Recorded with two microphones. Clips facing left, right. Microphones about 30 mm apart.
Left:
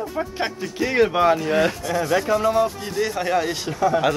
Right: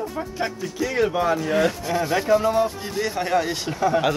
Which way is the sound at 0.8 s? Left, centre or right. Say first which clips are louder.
Left 4 dB; left.